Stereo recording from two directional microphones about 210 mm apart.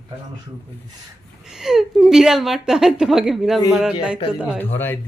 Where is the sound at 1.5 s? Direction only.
Centre (ahead or behind).